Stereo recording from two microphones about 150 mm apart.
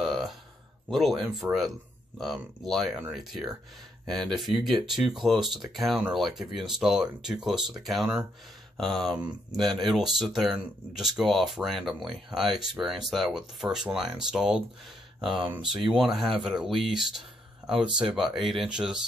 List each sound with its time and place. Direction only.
0.0 s a sound: centre (ahead or behind)
0.8 s speech: centre (ahead or behind)
15.2 s speech: 35° right (ahead or behind)
15.5 s speech: 5° right (ahead or behind)